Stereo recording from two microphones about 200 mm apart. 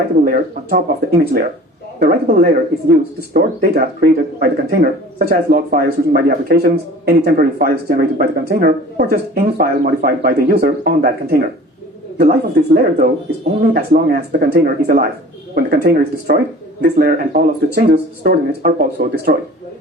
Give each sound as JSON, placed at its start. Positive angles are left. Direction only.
{"t": 0.3, "sound": "speech", "side_deg": -45}